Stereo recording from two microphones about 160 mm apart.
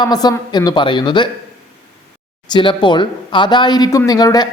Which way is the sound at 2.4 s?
30° left (ahead or behind).